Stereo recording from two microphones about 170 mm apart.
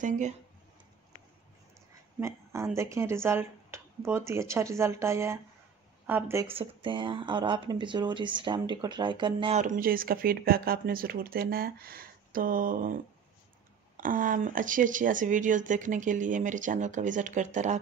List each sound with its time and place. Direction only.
2.1 s speech: 15° right (ahead or behind)
6.5 s speech: 30° right (ahead or behind)
9.6 s speech: 50° right (ahead or behind)
13.9 s speech: 55° right (ahead or behind)